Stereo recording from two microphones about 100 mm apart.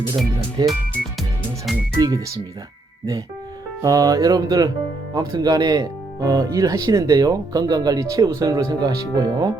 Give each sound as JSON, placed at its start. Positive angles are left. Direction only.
{"t": 0.6, "sound": "speech", "side_deg": -45}
{"t": 2.0, "sound": "speech", "side_deg": -40}
{"t": 3.8, "sound": "speech", "side_deg": -35}